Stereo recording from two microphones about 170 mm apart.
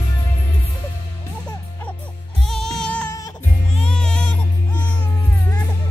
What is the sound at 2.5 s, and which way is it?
Music, 5° left (ahead or behind).